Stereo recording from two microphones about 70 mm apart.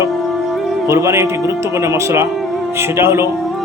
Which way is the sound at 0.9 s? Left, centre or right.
Right.